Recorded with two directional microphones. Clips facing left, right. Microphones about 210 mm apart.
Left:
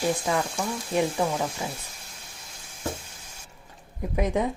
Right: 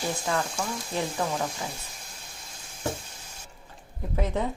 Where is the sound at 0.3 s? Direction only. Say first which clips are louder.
Left 2 dB; 15° left (ahead or behind).